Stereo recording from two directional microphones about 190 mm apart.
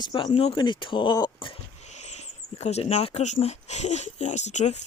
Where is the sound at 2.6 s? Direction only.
35° left (ahead or behind).